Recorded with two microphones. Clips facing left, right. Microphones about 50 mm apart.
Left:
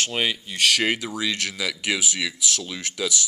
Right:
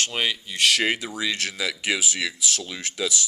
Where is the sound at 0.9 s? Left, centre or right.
Right.